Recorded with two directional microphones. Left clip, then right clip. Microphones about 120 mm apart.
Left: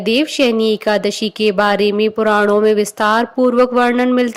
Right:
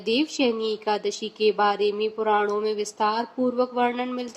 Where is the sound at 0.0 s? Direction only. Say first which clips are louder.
Left 9 dB; 50° left (ahead or behind).